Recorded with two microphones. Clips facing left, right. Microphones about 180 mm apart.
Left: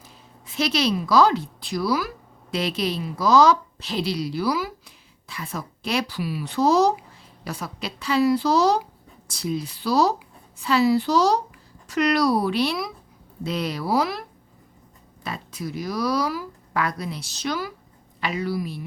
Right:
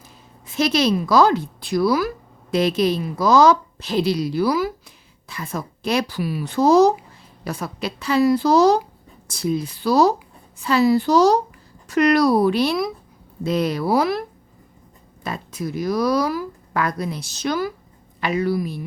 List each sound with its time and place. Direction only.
0.4 s speech: 45° right (ahead or behind)
15.2 s speech: 45° right (ahead or behind)